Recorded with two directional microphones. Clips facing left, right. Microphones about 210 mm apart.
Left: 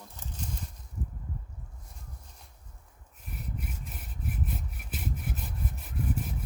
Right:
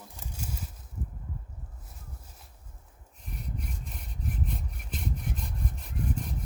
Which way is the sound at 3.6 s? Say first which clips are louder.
Even; 5° left (ahead or behind).